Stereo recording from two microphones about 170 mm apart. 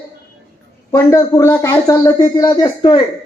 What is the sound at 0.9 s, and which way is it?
Speech, 15° left (ahead or behind).